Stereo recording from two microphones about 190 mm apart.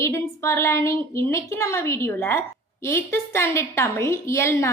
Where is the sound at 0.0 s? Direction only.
15° left (ahead or behind).